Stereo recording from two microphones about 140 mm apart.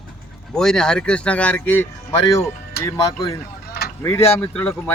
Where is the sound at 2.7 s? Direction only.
90° left.